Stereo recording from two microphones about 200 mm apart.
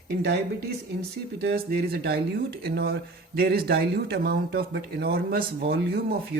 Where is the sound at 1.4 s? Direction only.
55° right (ahead or behind).